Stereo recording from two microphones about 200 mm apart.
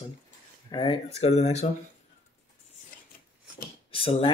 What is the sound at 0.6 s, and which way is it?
Speech, 25° left (ahead or behind).